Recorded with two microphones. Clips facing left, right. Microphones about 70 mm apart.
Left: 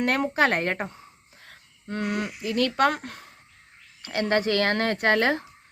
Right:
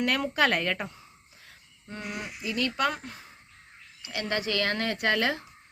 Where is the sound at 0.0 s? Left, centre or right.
Left.